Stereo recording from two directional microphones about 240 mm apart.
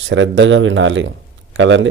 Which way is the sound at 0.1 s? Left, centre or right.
Right.